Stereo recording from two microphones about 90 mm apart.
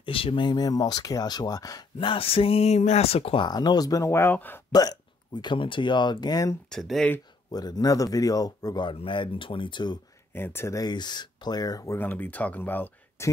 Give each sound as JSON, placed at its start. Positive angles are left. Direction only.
{"t": 0.0, "sound": "a sound", "side_deg": 90}
{"t": 0.5, "sound": "speech", "side_deg": 45}
{"t": 2.0, "sound": "a sound", "side_deg": 80}
{"t": 3.4, "sound": "speech", "side_deg": 50}
{"t": 4.1, "sound": "speech", "side_deg": 25}
{"t": 4.7, "sound": "speech", "side_deg": 50}
{"t": 6.7, "sound": "speech", "side_deg": 5}
{"t": 7.5, "sound": "speech", "side_deg": 45}
{"t": 8.8, "sound": "speech", "side_deg": 65}
{"t": 10.3, "sound": "speech", "side_deg": 25}
{"t": 10.8, "sound": "speech", "side_deg": 55}
{"t": 11.9, "sound": "speech", "side_deg": 20}
{"t": 13.2, "sound": "speech", "side_deg": 30}